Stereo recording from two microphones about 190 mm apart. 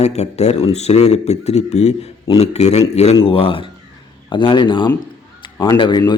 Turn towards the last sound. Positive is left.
turn(degrees=25)  # may be behind; listen again after turning